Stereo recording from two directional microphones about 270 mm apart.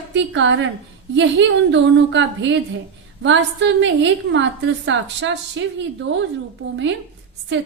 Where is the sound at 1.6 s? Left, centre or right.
Right.